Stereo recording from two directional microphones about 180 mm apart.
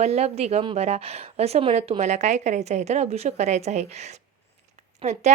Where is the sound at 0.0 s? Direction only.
35° right (ahead or behind).